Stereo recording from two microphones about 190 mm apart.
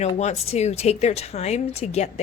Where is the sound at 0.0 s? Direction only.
35° left (ahead or behind).